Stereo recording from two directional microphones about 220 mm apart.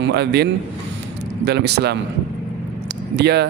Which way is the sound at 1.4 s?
50° right (ahead or behind).